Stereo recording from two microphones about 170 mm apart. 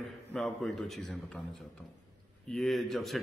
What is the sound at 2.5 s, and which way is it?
Speech, centre (ahead or behind).